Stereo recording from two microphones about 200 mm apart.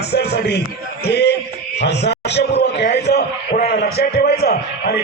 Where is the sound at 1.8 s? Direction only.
55° left (ahead or behind).